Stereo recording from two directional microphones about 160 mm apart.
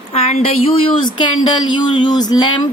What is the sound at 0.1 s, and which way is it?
A woman's voice, 40° left (ahead or behind).